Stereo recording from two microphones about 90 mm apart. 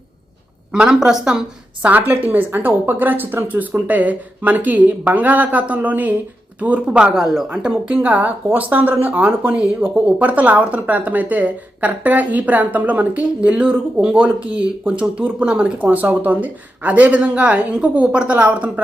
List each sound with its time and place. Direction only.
0.7 s speech: 5° right (ahead or behind)
1.8 s a woman's voice: 20° right (ahead or behind)